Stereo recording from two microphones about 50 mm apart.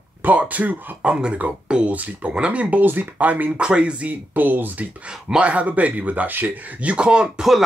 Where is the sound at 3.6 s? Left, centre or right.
Right.